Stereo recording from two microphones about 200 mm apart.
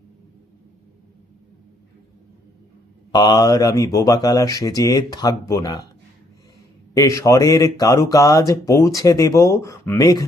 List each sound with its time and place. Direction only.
3.1 s speech: 20° left (ahead or behind)
6.9 s speech: 15° left (ahead or behind)